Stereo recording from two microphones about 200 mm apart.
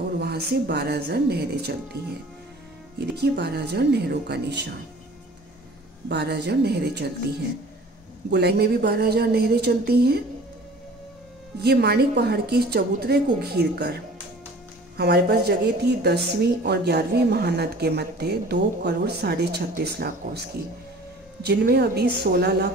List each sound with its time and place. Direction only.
0.2 s a woman's voice: 55° right (ahead or behind)
3.2 s a woman's voice: 55° right (ahead or behind)
6.0 s a woman's voice: 60° right (ahead or behind)
8.3 s a woman's voice: 55° right (ahead or behind)
11.6 s a woman's voice: 55° right (ahead or behind)